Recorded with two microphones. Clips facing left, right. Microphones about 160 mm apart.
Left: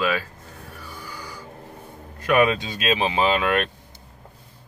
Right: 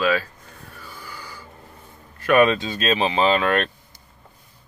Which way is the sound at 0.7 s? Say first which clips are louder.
Left 1 dB; 15° left (ahead or behind).